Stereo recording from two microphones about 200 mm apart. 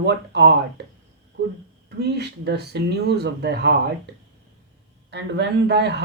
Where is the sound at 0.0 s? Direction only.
60° right (ahead or behind).